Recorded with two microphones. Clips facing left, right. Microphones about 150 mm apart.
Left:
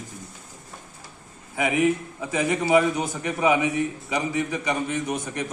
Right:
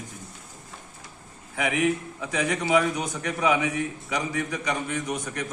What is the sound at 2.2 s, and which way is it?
A man's voice, 5° left (ahead or behind).